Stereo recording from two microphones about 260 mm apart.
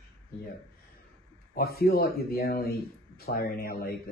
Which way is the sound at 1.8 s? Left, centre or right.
Left.